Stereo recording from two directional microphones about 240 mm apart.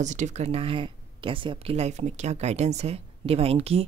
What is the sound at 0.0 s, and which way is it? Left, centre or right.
Speech, right.